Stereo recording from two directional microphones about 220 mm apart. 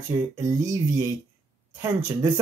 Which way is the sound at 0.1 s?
15° right (ahead or behind).